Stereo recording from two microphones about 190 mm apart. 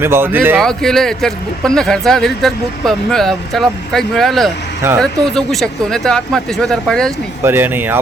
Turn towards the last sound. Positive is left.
turn(degrees=-10)  # may be behind; listen again after turning